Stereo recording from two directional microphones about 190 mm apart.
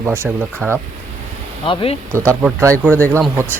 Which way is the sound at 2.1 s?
15° right (ahead or behind).